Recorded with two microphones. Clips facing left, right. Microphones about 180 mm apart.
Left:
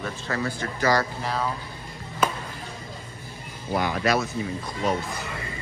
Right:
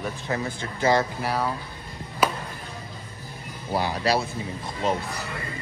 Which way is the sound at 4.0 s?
30° right (ahead or behind).